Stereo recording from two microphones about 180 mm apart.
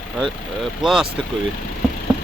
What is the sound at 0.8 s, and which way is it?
Speech, 5° right (ahead or behind).